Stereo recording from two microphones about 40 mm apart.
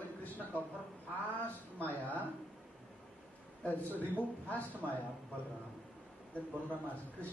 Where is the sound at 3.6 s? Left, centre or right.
Left.